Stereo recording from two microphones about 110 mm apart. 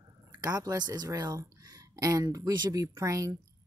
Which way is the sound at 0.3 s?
35° right (ahead or behind).